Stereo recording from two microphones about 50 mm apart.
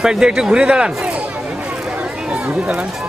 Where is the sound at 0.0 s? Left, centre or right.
Centre.